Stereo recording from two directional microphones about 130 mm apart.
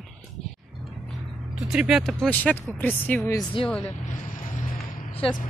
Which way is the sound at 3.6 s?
45° left (ahead or behind).